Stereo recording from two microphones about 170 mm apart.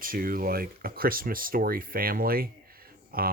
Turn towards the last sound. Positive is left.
turn(degrees=-60)  # may be behind; listen again after turning